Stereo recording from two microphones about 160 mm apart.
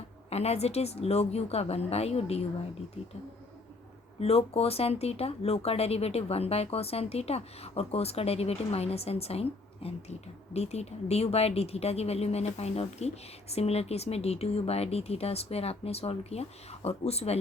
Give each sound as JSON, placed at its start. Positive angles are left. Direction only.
{"t": 0.3, "sound": "speech", "side_deg": 40}
{"t": 4.2, "sound": "speech", "side_deg": 40}